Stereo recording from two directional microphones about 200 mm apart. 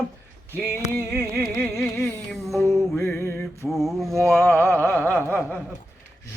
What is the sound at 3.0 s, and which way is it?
Music, 10° left (ahead or behind).